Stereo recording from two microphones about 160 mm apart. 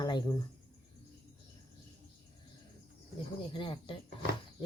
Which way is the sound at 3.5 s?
30° left (ahead or behind).